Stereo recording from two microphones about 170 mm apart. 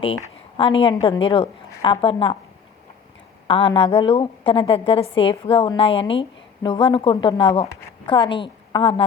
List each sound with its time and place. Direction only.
0.5 s a woman's voice: 30° left (ahead or behind)
3.4 s a woman's voice: 30° left (ahead or behind)